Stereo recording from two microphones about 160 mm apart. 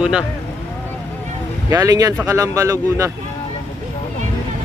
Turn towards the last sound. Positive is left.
turn(degrees=-20)  # may be behind; listen again after turning